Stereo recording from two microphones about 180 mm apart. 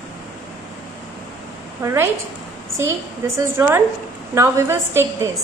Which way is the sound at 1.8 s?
15° right (ahead or behind).